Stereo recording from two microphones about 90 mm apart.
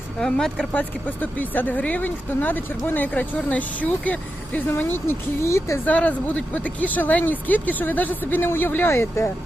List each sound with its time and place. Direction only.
0.2 s speech: 5° left (ahead or behind); by 5.8 s 35° left (ahead or behind)
5.8 s speech: 15° left (ahead or behind)